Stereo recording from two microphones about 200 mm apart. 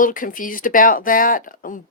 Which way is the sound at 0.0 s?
40° left (ahead or behind).